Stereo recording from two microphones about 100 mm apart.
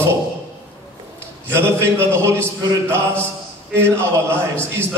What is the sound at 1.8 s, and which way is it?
Speech, 25° right (ahead or behind).